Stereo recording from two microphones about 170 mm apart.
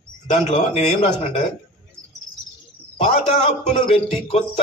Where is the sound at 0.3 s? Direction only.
40° left (ahead or behind).